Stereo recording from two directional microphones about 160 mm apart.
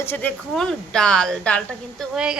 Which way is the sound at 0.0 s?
10° left (ahead or behind).